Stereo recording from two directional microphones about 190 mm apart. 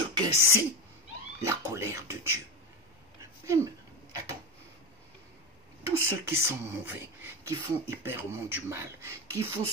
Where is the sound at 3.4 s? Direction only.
15° right (ahead or behind).